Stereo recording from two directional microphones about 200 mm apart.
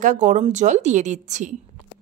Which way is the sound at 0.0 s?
40° right (ahead or behind).